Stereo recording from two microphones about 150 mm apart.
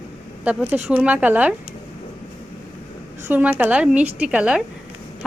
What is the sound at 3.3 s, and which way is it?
A woman's voice, 10° right (ahead or behind).